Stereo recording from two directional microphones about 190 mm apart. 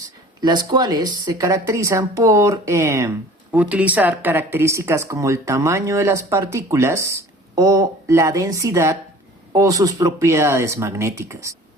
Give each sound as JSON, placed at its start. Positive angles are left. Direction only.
{"t": 0.4, "sound": "speech", "side_deg": -20}